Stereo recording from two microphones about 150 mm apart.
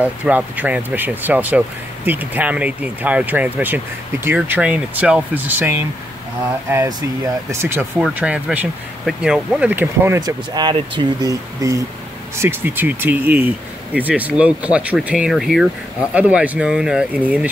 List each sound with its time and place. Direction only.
0.0 s speech: 10° right (ahead or behind)
8.1 s speech: 10° right (ahead or behind)
10.5 s speech: 30° right (ahead or behind); by 17.5 s 10° right (ahead or behind)